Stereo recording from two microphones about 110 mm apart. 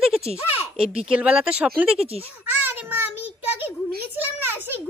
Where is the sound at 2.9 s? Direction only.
15° right (ahead or behind).